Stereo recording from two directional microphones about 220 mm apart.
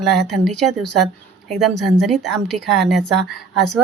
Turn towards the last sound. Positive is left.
turn(degrees=0)  # may be behind; listen again after turning